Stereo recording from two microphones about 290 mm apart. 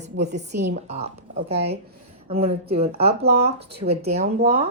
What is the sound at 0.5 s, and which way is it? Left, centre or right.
Speech, right.